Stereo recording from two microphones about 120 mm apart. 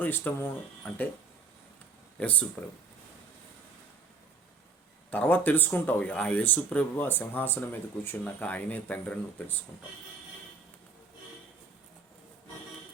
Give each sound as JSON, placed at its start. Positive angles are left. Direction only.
{"t": 0.0, "sound": "speech", "side_deg": 15}
{"t": 2.1, "sound": "speech", "side_deg": 10}
{"t": 5.1, "sound": "speech", "side_deg": 15}